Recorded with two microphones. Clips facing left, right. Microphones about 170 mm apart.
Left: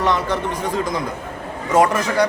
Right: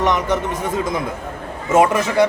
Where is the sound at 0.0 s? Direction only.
15° right (ahead or behind).